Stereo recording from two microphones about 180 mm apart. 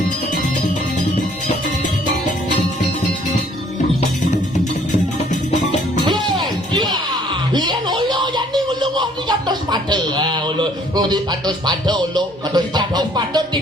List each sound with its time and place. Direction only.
6.1 s music: 25° right (ahead or behind)
7.5 s music: 25° right (ahead or behind)